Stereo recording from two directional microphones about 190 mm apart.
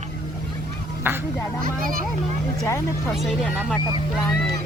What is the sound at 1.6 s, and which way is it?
Speech, 45° right (ahead or behind).